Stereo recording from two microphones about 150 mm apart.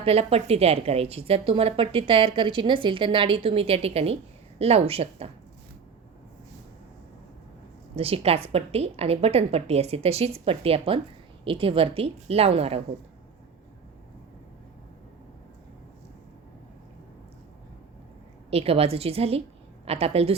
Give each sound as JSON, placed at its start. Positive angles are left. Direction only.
{"t": 0.0, "sound": "a woman's voice", "side_deg": -40}
{"t": 7.9, "sound": "a woman's voice", "side_deg": -40}
{"t": 18.5, "sound": "a woman's voice", "side_deg": -40}